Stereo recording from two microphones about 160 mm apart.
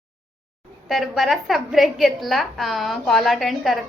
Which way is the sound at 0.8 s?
Centre (ahead or behind).